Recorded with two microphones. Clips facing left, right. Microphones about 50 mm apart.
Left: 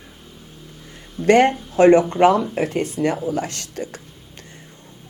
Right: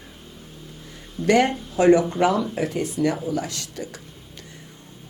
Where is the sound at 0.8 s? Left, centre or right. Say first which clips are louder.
Left 5 dB; left.